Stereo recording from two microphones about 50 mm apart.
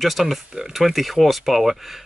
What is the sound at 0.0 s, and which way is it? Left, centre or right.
Speech, centre.